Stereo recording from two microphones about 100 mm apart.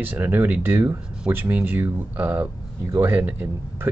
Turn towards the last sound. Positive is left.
turn(degrees=-15)  # may be behind; listen again after turning